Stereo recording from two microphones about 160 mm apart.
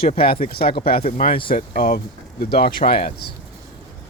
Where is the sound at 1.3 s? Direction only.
30° left (ahead or behind).